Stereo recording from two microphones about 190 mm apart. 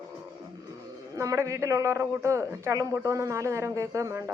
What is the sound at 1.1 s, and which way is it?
A woman's voice, 15° right (ahead or behind).